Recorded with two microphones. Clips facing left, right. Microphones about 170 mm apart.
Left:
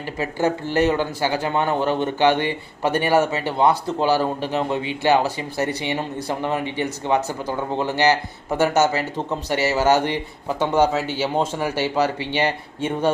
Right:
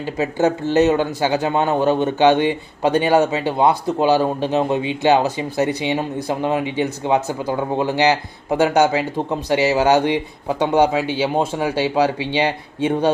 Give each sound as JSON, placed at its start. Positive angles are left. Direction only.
{"t": 0.0, "sound": "speech", "side_deg": -20}